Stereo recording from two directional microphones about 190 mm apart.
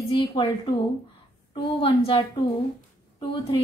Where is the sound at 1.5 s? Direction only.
25° left (ahead or behind).